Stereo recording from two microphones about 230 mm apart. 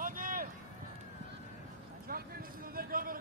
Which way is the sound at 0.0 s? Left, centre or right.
Right.